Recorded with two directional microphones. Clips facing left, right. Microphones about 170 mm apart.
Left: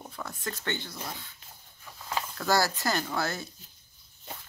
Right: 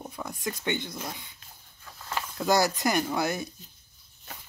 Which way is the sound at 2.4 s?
15° right (ahead or behind).